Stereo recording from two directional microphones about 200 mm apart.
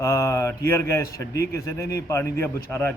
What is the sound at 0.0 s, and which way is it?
A man's voice, 15° left (ahead or behind).